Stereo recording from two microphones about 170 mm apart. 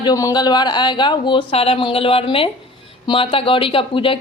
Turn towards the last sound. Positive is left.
turn(degrees=30)  # may be behind; listen again after turning